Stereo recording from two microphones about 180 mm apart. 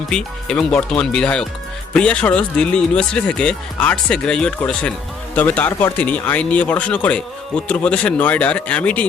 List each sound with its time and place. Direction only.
0.1 s speech: 5° left (ahead or behind)